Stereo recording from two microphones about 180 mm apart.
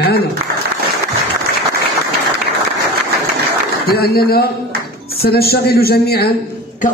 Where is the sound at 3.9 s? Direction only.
60° left (ahead or behind).